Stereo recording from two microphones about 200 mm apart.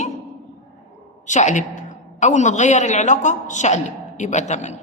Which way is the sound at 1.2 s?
35° left (ahead or behind).